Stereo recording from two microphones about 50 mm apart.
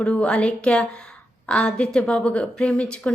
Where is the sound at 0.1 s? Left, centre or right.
Left.